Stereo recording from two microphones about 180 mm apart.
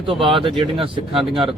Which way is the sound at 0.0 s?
30° right (ahead or behind).